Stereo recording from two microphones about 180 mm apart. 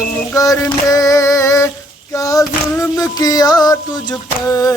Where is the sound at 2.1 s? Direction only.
20° left (ahead or behind).